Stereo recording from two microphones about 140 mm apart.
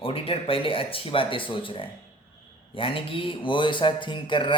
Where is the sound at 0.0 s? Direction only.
40° left (ahead or behind).